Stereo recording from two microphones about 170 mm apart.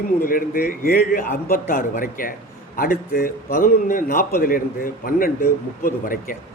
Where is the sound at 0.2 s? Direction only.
60° left (ahead or behind).